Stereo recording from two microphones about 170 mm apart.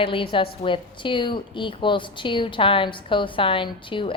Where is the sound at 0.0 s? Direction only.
30° left (ahead or behind).